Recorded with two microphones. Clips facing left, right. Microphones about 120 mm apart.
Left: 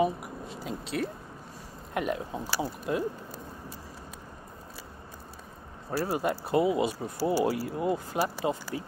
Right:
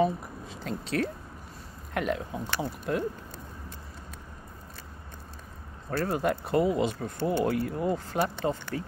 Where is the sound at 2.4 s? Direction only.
5° left (ahead or behind).